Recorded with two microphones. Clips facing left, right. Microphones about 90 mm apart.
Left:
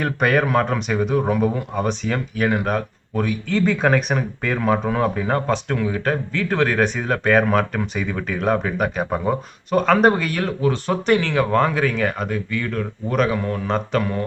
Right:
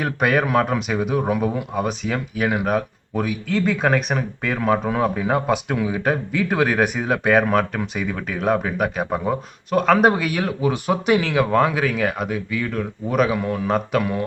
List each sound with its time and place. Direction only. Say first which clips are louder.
0.0 s speech: left 1 dB; 5° right (ahead or behind)